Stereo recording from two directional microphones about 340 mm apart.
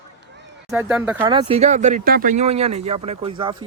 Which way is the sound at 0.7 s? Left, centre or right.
Centre.